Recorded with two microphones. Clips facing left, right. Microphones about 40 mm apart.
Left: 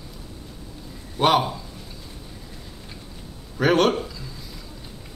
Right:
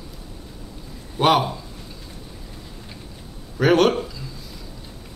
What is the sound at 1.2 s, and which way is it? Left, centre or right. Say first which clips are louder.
Speech: right 1 dB; centre.